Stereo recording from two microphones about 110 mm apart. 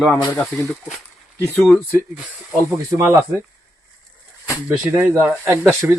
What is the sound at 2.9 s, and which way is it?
Speech, 20° right (ahead or behind).